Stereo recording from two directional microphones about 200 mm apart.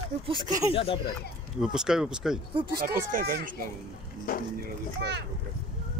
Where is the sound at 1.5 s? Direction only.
5° right (ahead or behind).